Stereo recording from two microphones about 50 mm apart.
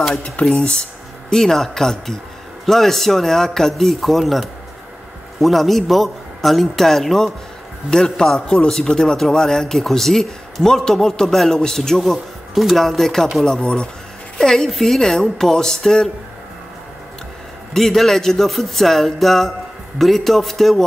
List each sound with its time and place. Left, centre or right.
0.5 s a man's voice: centre
13.6 s speech: centre
17.7 s a man's voice: centre